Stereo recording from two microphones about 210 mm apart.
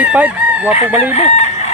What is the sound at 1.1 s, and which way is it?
Chicken, 30° left (ahead or behind).